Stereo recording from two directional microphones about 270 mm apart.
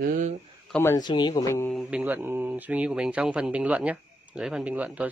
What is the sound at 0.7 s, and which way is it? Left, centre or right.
Speech, centre.